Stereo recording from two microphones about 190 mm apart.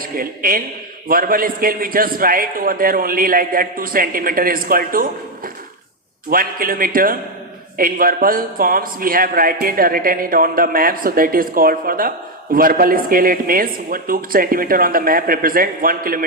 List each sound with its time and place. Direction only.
0.0 s a man's voice: 50° right (ahead or behind)
6.3 s a man's voice: 50° right (ahead or behind)